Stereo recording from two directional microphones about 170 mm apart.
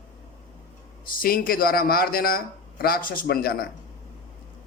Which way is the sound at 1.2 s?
60° left (ahead or behind).